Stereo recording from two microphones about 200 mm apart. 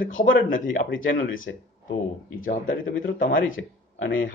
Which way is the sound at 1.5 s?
60° left (ahead or behind).